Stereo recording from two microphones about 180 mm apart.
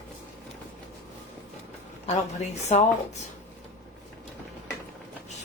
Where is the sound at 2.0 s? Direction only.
40° left (ahead or behind).